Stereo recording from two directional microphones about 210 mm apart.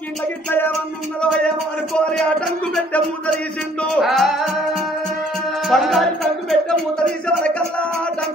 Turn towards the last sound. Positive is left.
turn(degrees=5)  # may be behind; listen again after turning